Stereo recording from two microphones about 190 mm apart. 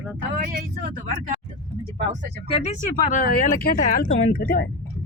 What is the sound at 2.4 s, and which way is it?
Speech, 35° left (ahead or behind).